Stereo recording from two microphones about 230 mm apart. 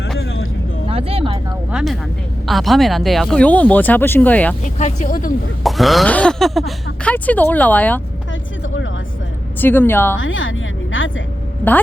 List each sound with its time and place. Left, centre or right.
0.2 s vehicle: left
0.9 s a sound: right
1.7 s speech: centre
4.6 s speech: left
5.6 s speech: centre
8.3 s vehicle: left
9.6 s speech: centre
10.2 s music: left